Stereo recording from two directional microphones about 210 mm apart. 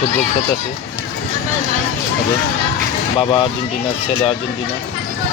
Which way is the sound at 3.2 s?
25° left (ahead or behind).